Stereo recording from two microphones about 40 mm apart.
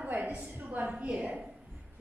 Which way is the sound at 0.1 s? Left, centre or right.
Right.